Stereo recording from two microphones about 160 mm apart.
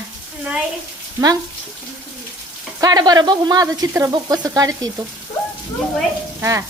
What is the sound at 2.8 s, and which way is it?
A woman's voice, 25° right (ahead or behind).